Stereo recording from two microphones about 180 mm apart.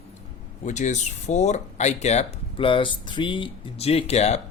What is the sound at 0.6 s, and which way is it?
Speech, 40° left (ahead or behind).